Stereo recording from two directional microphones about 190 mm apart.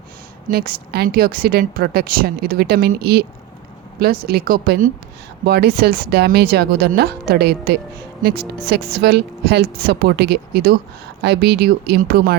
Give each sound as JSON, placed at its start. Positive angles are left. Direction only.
{"t": 0.4, "sound": "a woman's voice", "side_deg": -50}